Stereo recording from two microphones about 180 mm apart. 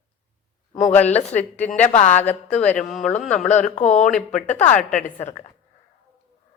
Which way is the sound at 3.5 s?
40° left (ahead or behind).